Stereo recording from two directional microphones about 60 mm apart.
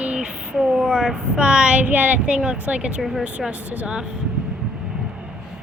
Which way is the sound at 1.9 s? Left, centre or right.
Right.